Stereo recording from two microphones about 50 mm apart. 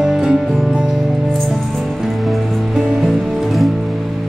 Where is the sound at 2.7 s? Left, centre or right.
Centre.